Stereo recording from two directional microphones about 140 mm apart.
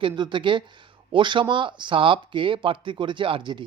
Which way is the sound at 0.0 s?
35° right (ahead or behind).